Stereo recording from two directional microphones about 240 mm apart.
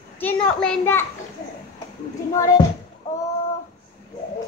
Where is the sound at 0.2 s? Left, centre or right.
Centre.